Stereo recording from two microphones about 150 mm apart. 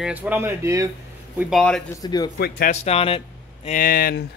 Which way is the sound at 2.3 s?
90° left.